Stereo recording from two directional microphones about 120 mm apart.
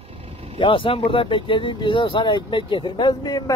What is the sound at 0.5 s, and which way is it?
Speech, 45° left (ahead or behind).